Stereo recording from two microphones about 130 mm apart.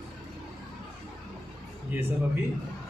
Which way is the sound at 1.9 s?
15° right (ahead or behind).